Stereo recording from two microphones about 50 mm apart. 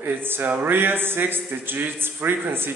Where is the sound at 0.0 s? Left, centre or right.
Right.